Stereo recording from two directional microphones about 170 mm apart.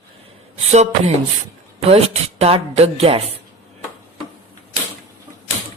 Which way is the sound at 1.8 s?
35° right (ahead or behind).